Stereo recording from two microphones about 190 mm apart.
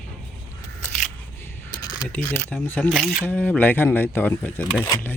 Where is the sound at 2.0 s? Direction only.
10° left (ahead or behind).